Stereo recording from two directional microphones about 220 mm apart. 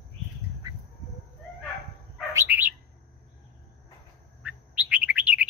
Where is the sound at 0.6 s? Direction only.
20° right (ahead or behind).